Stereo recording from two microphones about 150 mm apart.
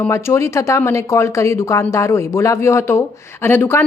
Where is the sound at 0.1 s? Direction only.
20° left (ahead or behind).